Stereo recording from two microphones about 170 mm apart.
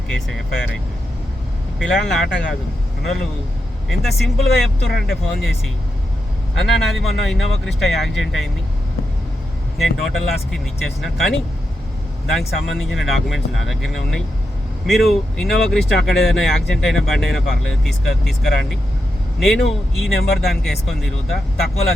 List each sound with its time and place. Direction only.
1.8 s speech: centre (ahead or behind)
6.6 s speech: centre (ahead or behind)
9.7 s speech: centre (ahead or behind)
12.2 s speech: centre (ahead or behind)
16.0 s speech: 75° left (ahead or behind)
16.2 s speech: centre (ahead or behind)